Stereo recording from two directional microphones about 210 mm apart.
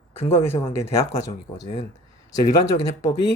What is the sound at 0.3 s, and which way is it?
Speech, 10° left (ahead or behind).